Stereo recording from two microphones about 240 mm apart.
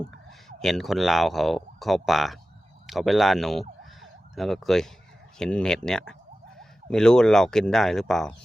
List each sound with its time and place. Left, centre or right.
0.0 s speech: centre